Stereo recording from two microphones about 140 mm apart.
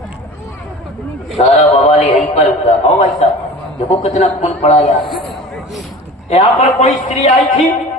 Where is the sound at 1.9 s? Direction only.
50° left (ahead or behind).